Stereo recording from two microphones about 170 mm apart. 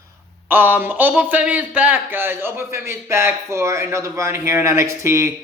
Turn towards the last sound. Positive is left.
turn(degrees=-15)  # may be behind; listen again after turning